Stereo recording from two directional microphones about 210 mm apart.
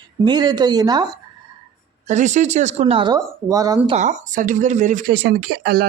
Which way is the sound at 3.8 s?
35° right (ahead or behind).